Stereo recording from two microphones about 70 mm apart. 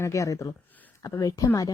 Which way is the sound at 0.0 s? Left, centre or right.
Left.